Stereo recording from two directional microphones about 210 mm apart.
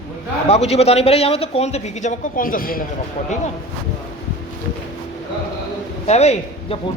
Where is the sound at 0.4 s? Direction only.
30° left (ahead or behind).